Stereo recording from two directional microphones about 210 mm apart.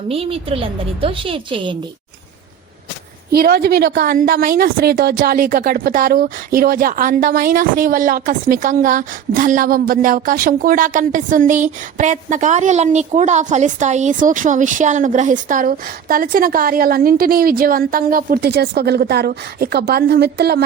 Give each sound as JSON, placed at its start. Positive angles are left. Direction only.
{"t": 0.1, "sound": "a woman's voice", "side_deg": -25}
{"t": 3.3, "sound": "a woman's voice", "side_deg": -45}